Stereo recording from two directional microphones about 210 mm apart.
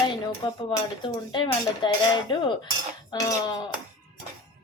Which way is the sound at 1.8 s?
20° left (ahead or behind).